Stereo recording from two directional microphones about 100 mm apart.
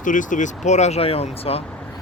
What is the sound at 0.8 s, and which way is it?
Speech, 85° left.